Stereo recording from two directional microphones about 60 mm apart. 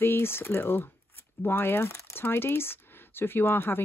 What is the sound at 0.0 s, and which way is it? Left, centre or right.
Speech, left.